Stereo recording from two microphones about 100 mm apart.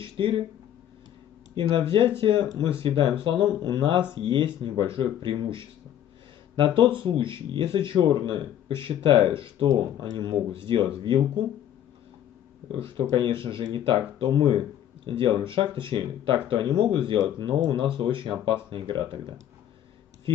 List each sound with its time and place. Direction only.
0.0 s a sound: 60° right (ahead or behind)
1.5 s speech: 55° right (ahead or behind)
12.7 s speech: 60° right (ahead or behind)